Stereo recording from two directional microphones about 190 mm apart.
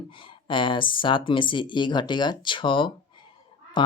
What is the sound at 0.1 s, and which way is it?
Speech, 25° left (ahead or behind).